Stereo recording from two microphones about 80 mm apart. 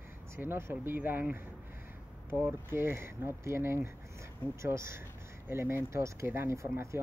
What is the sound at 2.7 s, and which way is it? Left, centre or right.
Speech, right.